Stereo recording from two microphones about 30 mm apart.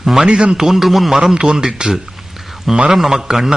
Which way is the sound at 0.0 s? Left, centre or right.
Centre.